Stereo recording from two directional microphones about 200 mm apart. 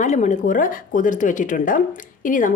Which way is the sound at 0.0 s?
35° left (ahead or behind).